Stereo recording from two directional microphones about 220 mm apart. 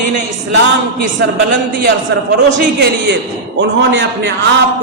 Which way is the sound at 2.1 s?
50° right (ahead or behind).